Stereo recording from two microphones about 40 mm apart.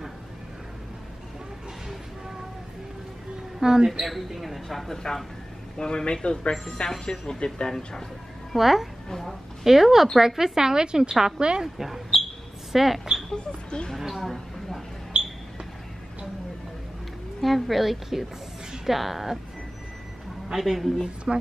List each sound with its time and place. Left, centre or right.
3.5 s a woman's voice: centre
4.1 s speech: centre; by 6.5 s left
6.9 s speech: centre
8.5 s a woman's voice: centre
9.1 s a woman's voice: centre
9.7 s a woman's voice: centre
11.6 s a woman's voice: centre
17.4 s a woman's voice: centre
20.5 s a woman's voice: centre